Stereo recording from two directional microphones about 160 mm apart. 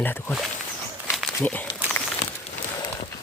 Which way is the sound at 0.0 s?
10° left (ahead or behind).